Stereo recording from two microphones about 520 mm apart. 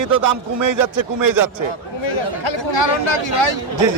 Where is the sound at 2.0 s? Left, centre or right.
Left.